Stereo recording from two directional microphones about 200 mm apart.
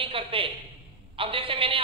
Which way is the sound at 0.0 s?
25° right (ahead or behind).